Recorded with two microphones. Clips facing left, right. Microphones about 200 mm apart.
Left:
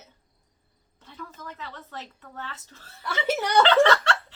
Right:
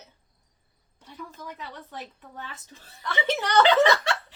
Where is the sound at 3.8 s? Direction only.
10° right (ahead or behind).